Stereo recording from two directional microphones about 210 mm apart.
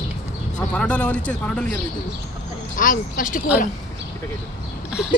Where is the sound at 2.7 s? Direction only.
40° left (ahead or behind).